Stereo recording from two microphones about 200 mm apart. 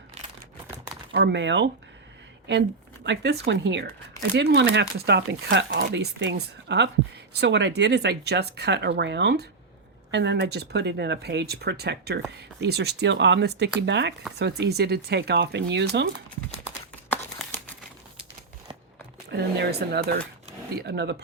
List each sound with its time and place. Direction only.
1.1 s speech: 60° right (ahead or behind)
19.3 s speech: 55° right (ahead or behind)